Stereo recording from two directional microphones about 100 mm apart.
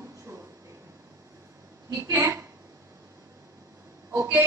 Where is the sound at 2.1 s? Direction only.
20° right (ahead or behind).